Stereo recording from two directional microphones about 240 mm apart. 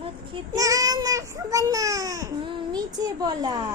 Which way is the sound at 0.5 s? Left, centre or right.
Centre.